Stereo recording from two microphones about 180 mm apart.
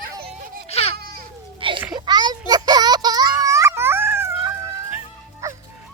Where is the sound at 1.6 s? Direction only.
30° right (ahead or behind).